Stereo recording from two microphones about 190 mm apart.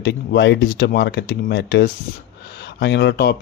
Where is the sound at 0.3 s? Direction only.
65° left (ahead or behind).